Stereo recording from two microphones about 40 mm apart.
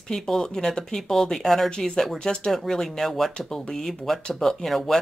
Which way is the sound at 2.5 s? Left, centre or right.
Centre.